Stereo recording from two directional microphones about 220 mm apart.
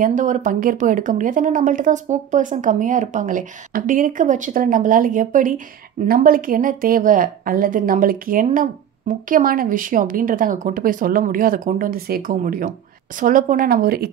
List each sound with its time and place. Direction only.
0.0 s a woman's voice: 35° right (ahead or behind)